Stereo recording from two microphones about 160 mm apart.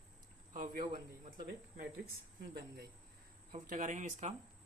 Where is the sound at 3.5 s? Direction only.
55° right (ahead or behind).